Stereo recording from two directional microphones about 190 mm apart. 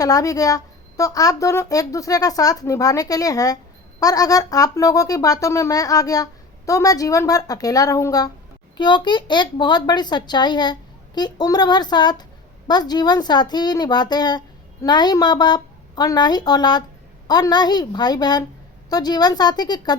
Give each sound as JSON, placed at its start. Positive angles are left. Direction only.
{"t": 0.0, "sound": "a woman's voice", "side_deg": 20}